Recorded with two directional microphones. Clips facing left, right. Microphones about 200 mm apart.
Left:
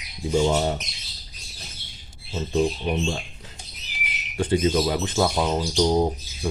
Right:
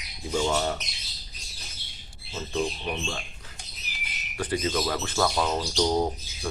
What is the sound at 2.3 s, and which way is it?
Speech, 30° left (ahead or behind).